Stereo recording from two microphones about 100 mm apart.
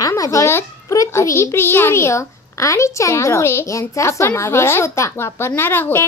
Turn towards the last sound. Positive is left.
turn(degrees=20)  # may be behind; listen again after turning